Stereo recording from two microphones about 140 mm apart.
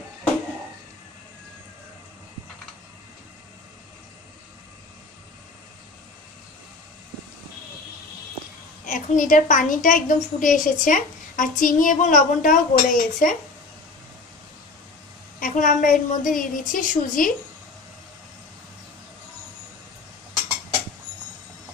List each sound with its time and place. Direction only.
8.8 s a woman's voice: 70° left (ahead or behind)
15.3 s a woman's voice: 75° left (ahead or behind)